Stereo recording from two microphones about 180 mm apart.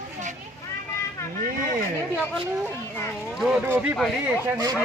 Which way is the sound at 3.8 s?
5° right (ahead or behind).